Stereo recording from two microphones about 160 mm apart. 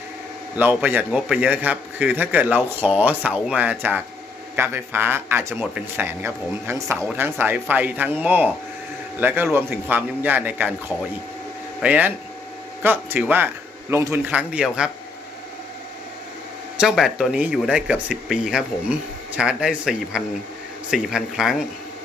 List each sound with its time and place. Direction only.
0.5 s a man's voice: 10° right (ahead or behind)
11.8 s a man's voice: 10° right (ahead or behind)
14.3 s speech: 5° right (ahead or behind)
16.7 s speech: 5° right (ahead or behind)